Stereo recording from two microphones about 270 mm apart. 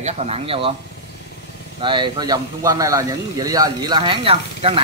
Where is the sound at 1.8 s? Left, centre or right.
Centre.